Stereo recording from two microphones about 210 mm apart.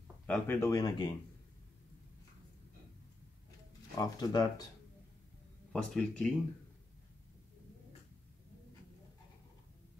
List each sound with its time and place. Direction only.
0.3 s speech: 10° left (ahead or behind)
3.9 s speech: 15° left (ahead or behind)
5.7 s speech: 5° left (ahead or behind)